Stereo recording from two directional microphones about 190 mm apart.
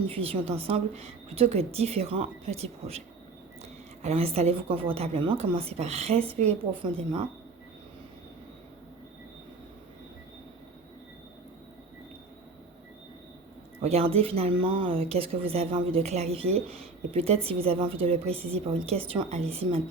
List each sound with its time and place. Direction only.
0.1 s speech: 30° right (ahead or behind)
4.0 s speech: 35° right (ahead or behind)
13.8 s speech: 35° right (ahead or behind)